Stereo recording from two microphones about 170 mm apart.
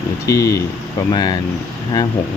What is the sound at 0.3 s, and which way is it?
Speech, 20° left (ahead or behind).